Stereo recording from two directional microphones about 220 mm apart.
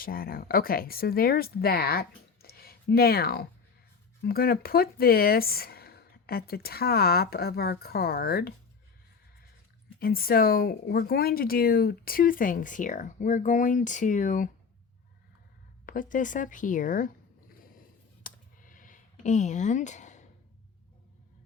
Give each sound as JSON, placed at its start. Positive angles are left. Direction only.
{"t": 0.0, "sound": "speech", "side_deg": 40}
{"t": 10.0, "sound": "speech", "side_deg": 45}
{"t": 15.9, "sound": "speech", "side_deg": 35}
{"t": 17.7, "sound": "a sound", "side_deg": 40}